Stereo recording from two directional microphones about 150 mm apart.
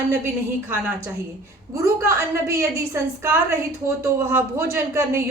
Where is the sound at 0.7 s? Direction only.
15° right (ahead or behind).